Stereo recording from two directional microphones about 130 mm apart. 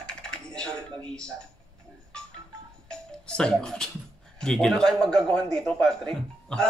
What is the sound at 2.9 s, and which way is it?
Music, 5° left (ahead or behind).